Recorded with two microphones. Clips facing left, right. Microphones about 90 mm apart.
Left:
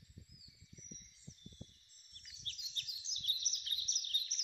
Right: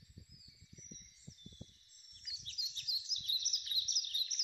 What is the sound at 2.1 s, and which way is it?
Bird, 5° right (ahead or behind).